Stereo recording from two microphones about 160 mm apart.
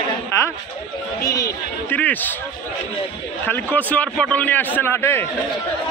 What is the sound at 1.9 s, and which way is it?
Speech, 10° left (ahead or behind).